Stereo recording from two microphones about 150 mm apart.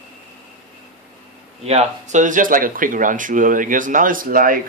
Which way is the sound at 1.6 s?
45° right (ahead or behind).